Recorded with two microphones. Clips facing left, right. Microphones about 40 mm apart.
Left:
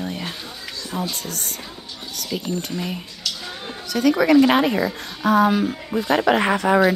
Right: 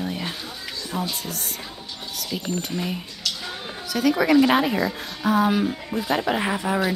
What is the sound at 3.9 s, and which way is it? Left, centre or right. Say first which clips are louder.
Speech: left 3 dB; centre.